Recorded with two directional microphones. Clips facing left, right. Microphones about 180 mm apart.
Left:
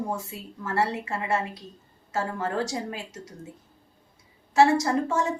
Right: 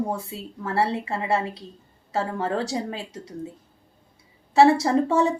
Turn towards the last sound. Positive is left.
turn(degrees=-30)  # may be behind; listen again after turning